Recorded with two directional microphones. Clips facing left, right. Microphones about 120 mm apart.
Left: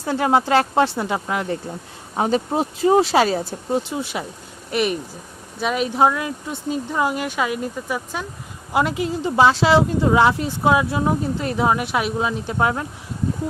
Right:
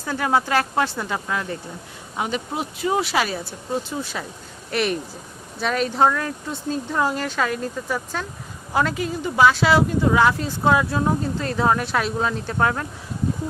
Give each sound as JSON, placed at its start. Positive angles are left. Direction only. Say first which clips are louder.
{"t": 0.0, "sound": "speech", "louder": "left 3 dB", "side_deg": 25}
{"t": 2.1, "sound": "speech", "louder": "left 6 dB", "side_deg": 35}
{"t": 3.7, "sound": "speech", "louder": "left 3 dB", "side_deg": 20}
{"t": 4.7, "sound": "a woman's voice", "louder": "left 2 dB", "side_deg": 5}